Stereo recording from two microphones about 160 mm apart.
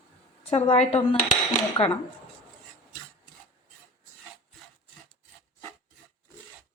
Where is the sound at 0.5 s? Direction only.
40° left (ahead or behind).